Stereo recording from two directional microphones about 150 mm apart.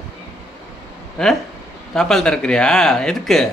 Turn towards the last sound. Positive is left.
turn(degrees=0)  # may be behind; listen again after turning